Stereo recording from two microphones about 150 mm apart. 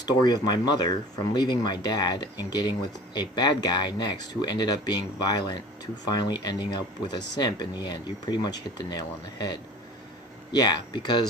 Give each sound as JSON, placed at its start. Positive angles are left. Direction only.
{"t": 0.0, "sound": "speech", "side_deg": 30}